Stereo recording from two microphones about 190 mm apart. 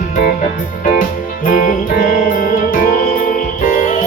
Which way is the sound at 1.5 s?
45° left (ahead or behind).